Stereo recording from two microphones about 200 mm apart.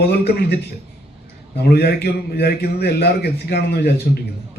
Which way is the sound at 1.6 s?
55° left (ahead or behind).